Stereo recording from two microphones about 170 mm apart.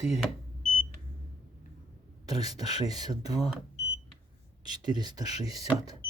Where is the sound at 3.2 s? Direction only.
35° left (ahead or behind).